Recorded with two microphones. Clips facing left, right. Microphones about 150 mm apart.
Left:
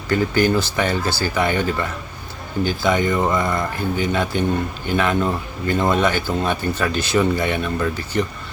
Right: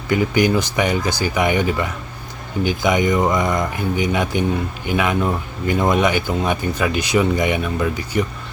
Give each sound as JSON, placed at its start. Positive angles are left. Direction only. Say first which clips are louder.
{"t": 0.1, "sound": "speech", "louder": "right 1 dB", "side_deg": -15}